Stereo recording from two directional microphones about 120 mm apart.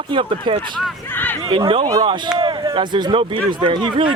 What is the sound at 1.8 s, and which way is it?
Speech, 30° right (ahead or behind).